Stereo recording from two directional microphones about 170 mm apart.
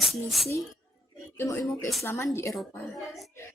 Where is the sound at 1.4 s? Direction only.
20° left (ahead or behind).